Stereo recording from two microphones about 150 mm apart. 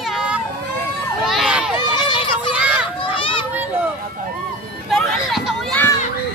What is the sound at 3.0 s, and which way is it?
Children playing, 35° left (ahead or behind).